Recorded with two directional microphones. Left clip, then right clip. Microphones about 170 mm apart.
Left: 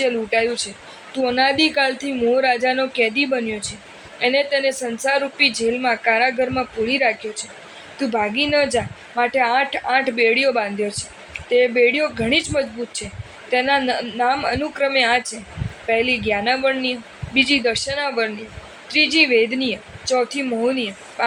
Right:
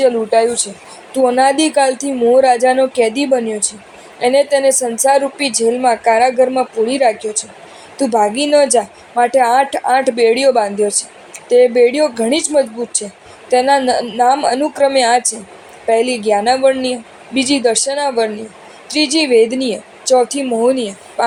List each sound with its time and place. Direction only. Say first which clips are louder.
0.0 s a woman's voice: right 7 dB; 35° right (ahead or behind)